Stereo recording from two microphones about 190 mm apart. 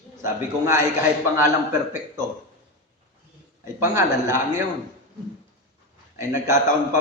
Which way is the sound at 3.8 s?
15° right (ahead or behind).